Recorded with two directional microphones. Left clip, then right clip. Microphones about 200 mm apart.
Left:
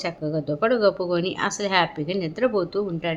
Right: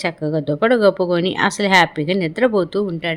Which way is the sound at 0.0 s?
25° right (ahead or behind).